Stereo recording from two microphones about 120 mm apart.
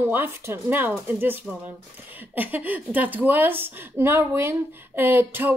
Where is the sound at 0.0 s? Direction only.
20° right (ahead or behind).